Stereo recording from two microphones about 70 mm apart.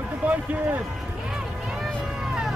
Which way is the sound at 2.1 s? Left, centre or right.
Centre.